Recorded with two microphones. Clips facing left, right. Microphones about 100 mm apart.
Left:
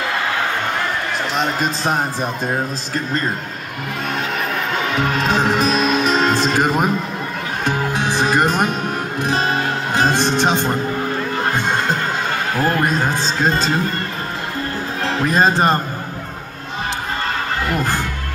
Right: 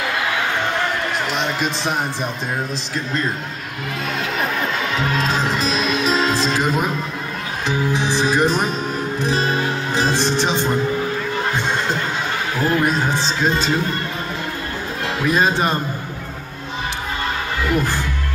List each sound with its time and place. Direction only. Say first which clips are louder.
1.4 s speech: left 2 dB; 40° left (ahead or behind)
5.3 s speech: left 4 dB; 55° left (ahead or behind)
7.6 s music: even; 50° left (ahead or behind)
9.2 s speech: left 1 dB; 50° left (ahead or behind)
11.5 s music: left 2 dB; 50° left (ahead or behind)
12.6 s speech: right 1 dB; 45° left (ahead or behind)
15.2 s speech: left 2 dB; 40° left (ahead or behind)